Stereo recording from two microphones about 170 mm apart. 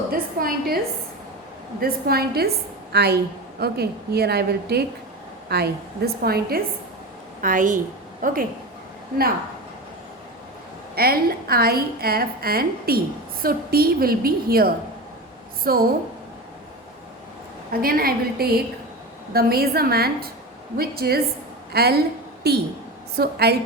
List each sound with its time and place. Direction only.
0.1 s a sound: 60° right (ahead or behind)
1.8 s a woman's voice: 65° right (ahead or behind)
7.4 s a woman's voice: 50° right (ahead or behind)
10.9 s a woman's voice: 60° right (ahead or behind)
17.7 s a woman's voice: 60° right (ahead or behind)